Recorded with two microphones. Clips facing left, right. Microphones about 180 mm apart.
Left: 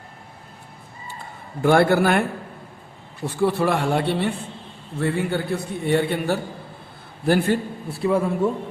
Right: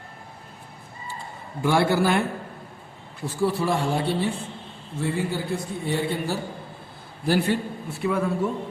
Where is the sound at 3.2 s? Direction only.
60° left (ahead or behind).